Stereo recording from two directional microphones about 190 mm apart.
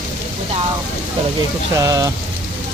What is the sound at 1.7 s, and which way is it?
Speech, 20° right (ahead or behind).